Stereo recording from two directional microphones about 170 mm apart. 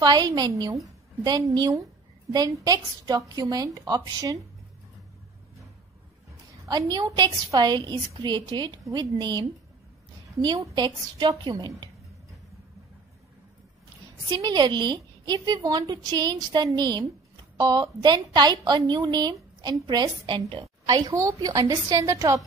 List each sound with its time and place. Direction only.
0.0 s a woman's voice: 25° right (ahead or behind)
6.7 s a woman's voice: 25° right (ahead or behind)
14.3 s a woman's voice: 25° right (ahead or behind)